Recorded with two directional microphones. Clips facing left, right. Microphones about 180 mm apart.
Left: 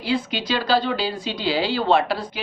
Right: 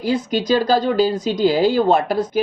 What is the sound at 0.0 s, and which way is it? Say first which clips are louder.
Speech: right 5 dB; 45° right (ahead or behind).